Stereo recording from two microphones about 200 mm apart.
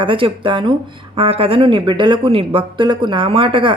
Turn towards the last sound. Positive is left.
turn(degrees=-25)  # may be behind; listen again after turning